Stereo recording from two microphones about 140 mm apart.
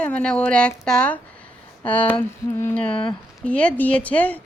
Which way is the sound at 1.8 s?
10° left (ahead or behind).